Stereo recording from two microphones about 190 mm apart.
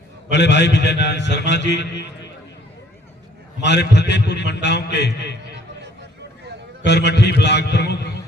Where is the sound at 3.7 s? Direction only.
60° left (ahead or behind).